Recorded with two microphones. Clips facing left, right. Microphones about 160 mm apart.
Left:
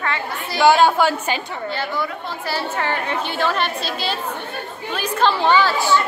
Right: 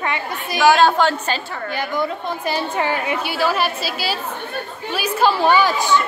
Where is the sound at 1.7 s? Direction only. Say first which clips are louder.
Right 3 dB; 15° right (ahead or behind).